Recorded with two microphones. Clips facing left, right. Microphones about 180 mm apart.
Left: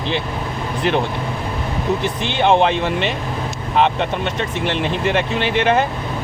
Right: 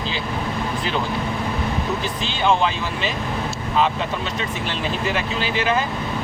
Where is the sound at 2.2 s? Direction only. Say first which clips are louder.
Left 5 dB; 60° left (ahead or behind).